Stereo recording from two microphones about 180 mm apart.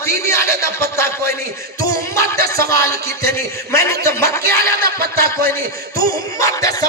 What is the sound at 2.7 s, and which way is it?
Speech, 15° left (ahead or behind).